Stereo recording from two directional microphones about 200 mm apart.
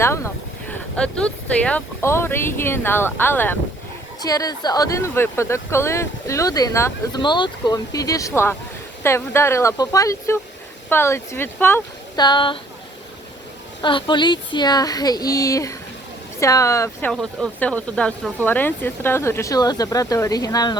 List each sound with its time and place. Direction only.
0.7 s speech: 5° left (ahead or behind); by 12.5 s 25° left (ahead or behind)
13.8 s speech: 25° left (ahead or behind)
17.1 s speech: 5° left (ahead or behind); by 20.7 s 20° left (ahead or behind)